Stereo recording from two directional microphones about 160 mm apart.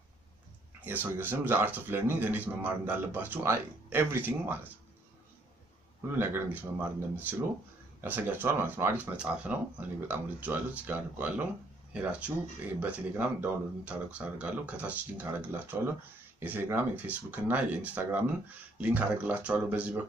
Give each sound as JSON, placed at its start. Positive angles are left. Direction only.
{"t": 0.8, "sound": "a man's voice", "side_deg": -10}
{"t": 6.1, "sound": "a man's voice", "side_deg": -10}